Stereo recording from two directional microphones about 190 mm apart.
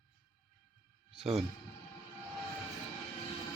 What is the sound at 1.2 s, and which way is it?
Speech, centre (ahead or behind).